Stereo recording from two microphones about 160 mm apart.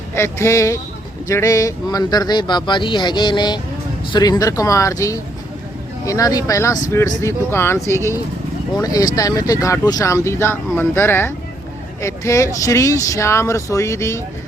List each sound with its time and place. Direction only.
0.1 s speech: 15° left (ahead or behind)